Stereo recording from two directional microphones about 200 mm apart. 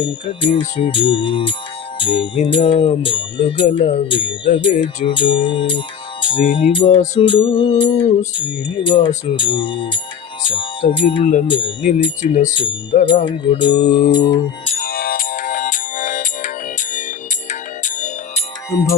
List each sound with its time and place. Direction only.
0.0 s music: 25° left (ahead or behind)
10.4 s speech: 25° left (ahead or behind)
11.4 s music: 25° left (ahead or behind)
14.8 s music: 45° left (ahead or behind)